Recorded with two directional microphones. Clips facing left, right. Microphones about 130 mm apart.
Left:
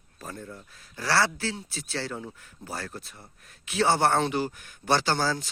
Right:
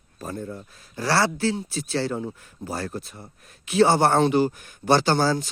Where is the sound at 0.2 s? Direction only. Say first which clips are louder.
Right 7 dB; 30° right (ahead or behind).